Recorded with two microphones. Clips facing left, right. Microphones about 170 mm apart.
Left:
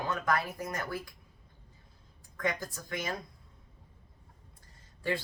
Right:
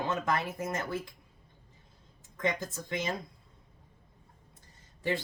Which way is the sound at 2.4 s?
20° right (ahead or behind).